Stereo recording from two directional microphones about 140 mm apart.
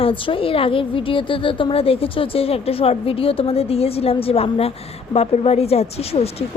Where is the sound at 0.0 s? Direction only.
40° left (ahead or behind).